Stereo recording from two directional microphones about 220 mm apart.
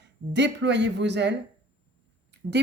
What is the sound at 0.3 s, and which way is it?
Speech, 50° right (ahead or behind).